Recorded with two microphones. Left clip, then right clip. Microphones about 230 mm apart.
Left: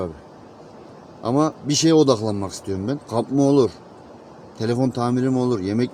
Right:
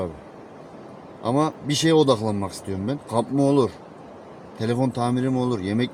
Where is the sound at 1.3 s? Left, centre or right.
Centre.